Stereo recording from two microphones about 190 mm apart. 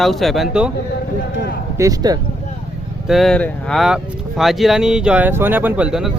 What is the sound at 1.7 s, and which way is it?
Speech, 15° right (ahead or behind).